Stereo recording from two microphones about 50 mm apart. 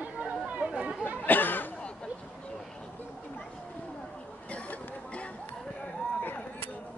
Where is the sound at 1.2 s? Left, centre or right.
Left.